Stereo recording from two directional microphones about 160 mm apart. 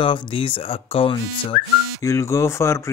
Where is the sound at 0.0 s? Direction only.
30° left (ahead or behind).